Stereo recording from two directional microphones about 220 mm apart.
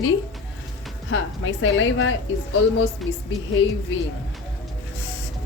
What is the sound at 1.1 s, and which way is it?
A woman's voice, 60° left (ahead or behind).